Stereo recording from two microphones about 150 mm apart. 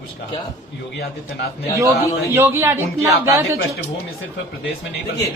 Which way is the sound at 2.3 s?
15° right (ahead or behind).